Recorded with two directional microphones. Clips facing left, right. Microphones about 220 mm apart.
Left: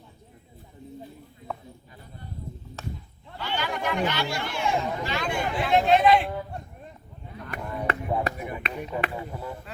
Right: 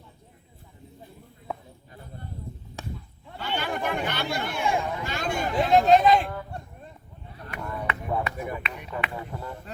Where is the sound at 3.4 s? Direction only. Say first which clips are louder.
Even; 50° right (ahead or behind).